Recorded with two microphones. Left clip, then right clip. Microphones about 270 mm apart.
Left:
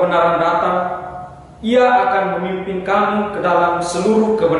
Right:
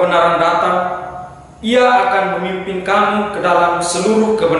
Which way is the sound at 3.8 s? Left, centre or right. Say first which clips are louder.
Right 2 dB; left.